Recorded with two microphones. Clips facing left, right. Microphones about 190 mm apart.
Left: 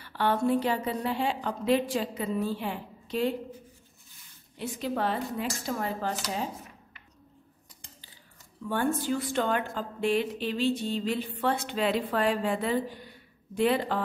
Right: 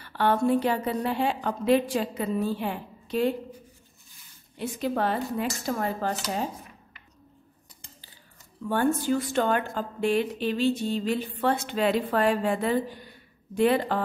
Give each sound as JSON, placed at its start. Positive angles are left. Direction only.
{"t": 0.0, "sound": "speech", "side_deg": -50}
{"t": 4.6, "sound": "speech", "side_deg": -50}
{"t": 8.6, "sound": "speech", "side_deg": -45}